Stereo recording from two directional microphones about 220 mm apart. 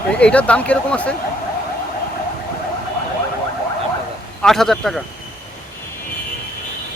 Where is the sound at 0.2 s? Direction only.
5° left (ahead or behind).